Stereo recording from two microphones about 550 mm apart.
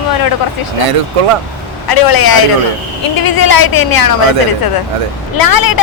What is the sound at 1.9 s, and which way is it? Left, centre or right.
Speech, left.